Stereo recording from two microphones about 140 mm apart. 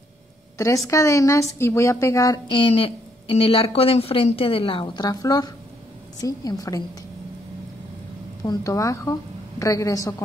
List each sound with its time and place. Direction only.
0.6 s a woman's voice: 20° left (ahead or behind)
8.5 s a woman's voice: 25° left (ahead or behind)